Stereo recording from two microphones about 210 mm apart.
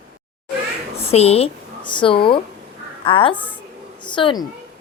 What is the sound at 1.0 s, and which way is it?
A woman's voice, 30° left (ahead or behind).